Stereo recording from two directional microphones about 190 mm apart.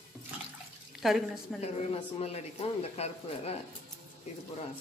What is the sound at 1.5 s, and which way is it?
Speech, 35° left (ahead or behind).